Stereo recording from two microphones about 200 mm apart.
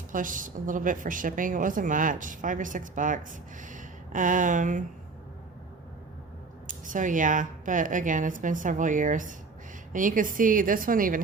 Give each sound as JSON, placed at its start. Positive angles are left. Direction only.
{"t": 0.1, "sound": "a woman's voice", "side_deg": -40}
{"t": 6.7, "sound": "a woman's voice", "side_deg": -40}